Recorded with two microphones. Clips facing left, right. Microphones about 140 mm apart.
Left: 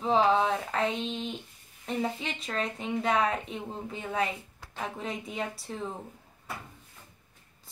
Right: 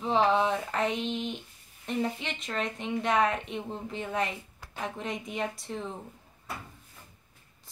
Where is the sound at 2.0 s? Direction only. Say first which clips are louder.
Right 1 dB; 5° left (ahead or behind).